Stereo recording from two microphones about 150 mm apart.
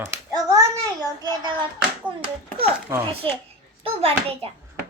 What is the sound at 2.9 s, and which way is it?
Speech, 20° right (ahead or behind).